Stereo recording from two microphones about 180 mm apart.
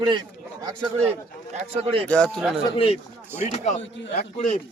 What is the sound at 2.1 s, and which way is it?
Speech, 5° left (ahead or behind).